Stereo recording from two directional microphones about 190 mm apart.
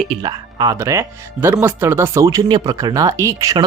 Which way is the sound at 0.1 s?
20° right (ahead or behind).